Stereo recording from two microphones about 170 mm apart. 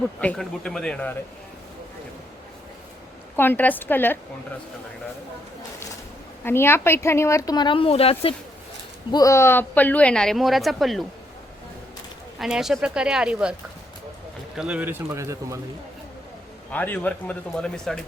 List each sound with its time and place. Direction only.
0.2 s a woman's voice: 5° left (ahead or behind)
3.3 s speech: 10° left (ahead or behind)
6.4 s speech: 15° left (ahead or behind); by 8.4 s 35° left (ahead or behind)
9.1 s a woman's voice: 20° left (ahead or behind); by 11.0 s centre (ahead or behind)
12.4 s a woman's voice: 5° right (ahead or behind); by 15.6 s 20° right (ahead or behind)
16.7 s speech: 10° left (ahead or behind)